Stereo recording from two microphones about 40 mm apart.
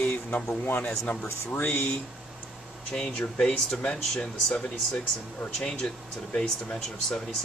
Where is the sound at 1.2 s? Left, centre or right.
Left.